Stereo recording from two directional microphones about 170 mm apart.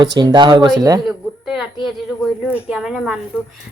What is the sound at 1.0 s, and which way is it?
A woman's voice, centre (ahead or behind).